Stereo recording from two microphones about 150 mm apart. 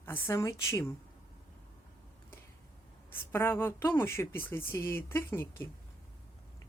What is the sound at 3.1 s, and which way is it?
A woman's voice, 15° left (ahead or behind).